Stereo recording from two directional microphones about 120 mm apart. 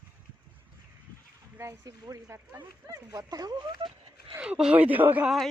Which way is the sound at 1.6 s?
25° right (ahead or behind).